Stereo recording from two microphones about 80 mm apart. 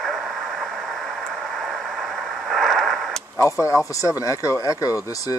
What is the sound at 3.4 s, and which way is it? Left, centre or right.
Speech, left.